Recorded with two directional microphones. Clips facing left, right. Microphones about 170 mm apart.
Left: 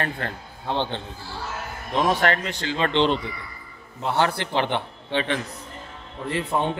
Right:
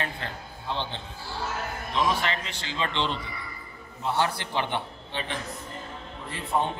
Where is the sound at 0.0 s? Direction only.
55° left (ahead or behind).